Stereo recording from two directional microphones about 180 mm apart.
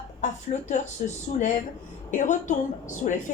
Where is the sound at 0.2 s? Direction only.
40° left (ahead or behind).